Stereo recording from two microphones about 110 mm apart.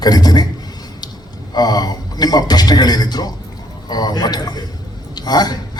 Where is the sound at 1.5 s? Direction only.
40° left (ahead or behind).